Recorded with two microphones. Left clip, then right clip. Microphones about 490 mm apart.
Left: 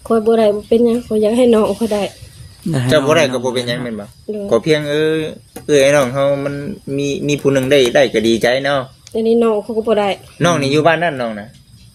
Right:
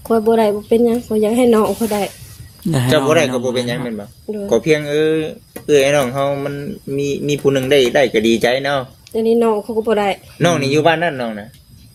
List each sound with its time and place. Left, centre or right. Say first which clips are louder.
0.1 s speech: left 1 dB; right
3.1 s speech: left 1 dB; right
9.1 s speech: left 1 dB; right
10.3 s speech: left 1 dB; right